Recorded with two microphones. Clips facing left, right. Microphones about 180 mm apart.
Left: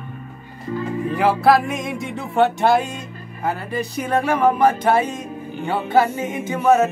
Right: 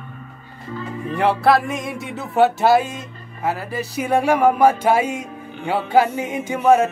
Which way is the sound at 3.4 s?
5° right (ahead or behind).